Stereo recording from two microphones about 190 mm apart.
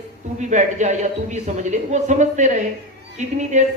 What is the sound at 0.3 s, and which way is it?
Speech, 40° right (ahead or behind).